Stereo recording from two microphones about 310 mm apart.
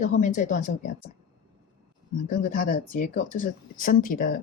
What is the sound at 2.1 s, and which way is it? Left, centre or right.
Speech, left.